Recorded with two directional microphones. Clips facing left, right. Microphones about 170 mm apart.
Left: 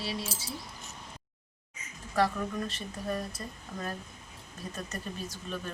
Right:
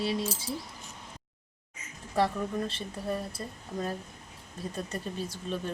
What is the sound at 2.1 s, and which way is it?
Speech, 30° right (ahead or behind).